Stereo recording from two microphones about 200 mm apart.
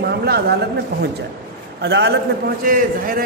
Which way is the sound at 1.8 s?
55° right (ahead or behind).